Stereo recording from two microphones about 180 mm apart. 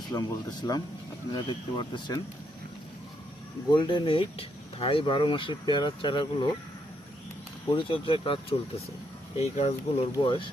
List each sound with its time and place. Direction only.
0.1 s speech: 20° left (ahead or behind)
3.7 s speech: 25° left (ahead or behind)
7.7 s speech: 30° left (ahead or behind)
10.2 s speech: 25° left (ahead or behind)